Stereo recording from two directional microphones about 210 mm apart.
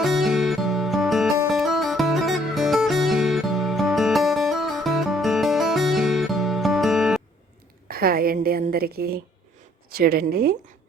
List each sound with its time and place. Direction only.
0.0 s music: centre (ahead or behind)
7.9 s a woman's voice: 45° right (ahead or behind)